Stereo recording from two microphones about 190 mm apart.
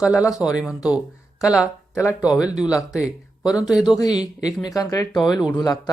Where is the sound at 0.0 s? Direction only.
5° right (ahead or behind).